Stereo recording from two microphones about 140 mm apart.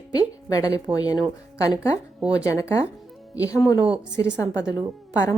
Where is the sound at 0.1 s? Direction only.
30° left (ahead or behind).